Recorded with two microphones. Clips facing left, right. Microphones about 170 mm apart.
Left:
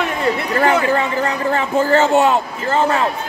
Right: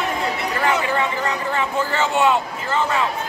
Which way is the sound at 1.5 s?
45° left (ahead or behind).